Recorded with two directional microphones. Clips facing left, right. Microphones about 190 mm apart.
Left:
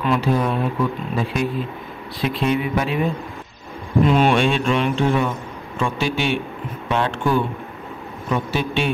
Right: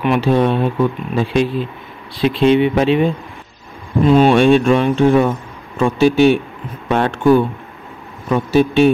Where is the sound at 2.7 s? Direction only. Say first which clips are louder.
Right 8 dB; 25° right (ahead or behind).